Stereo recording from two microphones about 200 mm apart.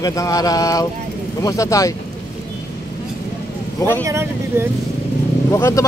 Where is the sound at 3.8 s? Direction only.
10° left (ahead or behind).